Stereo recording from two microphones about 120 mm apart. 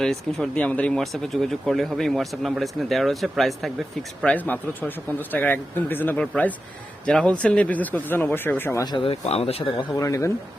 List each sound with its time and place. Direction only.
0.0 s speech: 5° left (ahead or behind)
4.2 s speech: 10° left (ahead or behind)
8.8 s speech: 40° left (ahead or behind)
9.9 s speech: 25° left (ahead or behind)